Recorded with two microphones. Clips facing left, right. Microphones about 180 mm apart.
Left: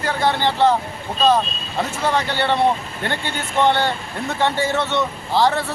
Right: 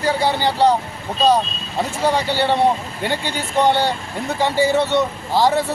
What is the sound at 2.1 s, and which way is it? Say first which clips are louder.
Speech: right 2 dB; 10° right (ahead or behind).